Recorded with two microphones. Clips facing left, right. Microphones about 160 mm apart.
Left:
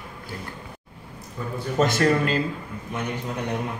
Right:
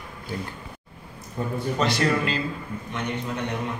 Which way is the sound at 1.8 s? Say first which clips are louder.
Left 4 dB; 45° left (ahead or behind).